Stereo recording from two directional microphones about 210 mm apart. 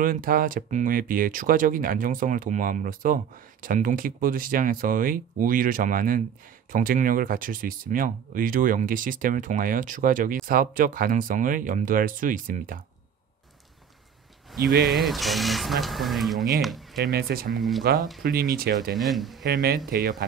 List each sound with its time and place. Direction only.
0.0 s speech: 40° right (ahead or behind)
14.6 s speech: 45° right (ahead or behind)
15.0 s speech: centre (ahead or behind)
17.0 s speech: 45° right (ahead or behind)
17.6 s speech: centre (ahead or behind)
18.2 s speech: 45° right (ahead or behind)
18.9 s speech: centre (ahead or behind)
19.4 s speech: 45° right (ahead or behind)